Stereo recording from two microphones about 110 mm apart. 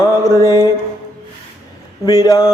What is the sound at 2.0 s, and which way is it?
Speech, 35° left (ahead or behind).